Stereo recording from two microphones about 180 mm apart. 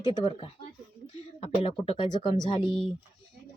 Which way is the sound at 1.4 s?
30° left (ahead or behind).